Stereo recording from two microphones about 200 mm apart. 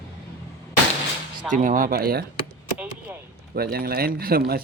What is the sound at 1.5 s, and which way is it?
Speech, 40° right (ahead or behind).